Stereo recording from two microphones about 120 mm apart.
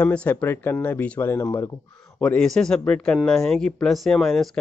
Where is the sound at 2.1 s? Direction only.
10° left (ahead or behind).